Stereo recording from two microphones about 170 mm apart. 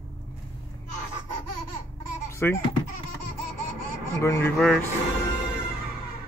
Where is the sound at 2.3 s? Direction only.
15° left (ahead or behind).